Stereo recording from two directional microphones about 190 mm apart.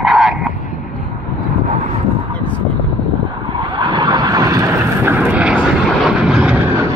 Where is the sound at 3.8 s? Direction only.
25° right (ahead or behind).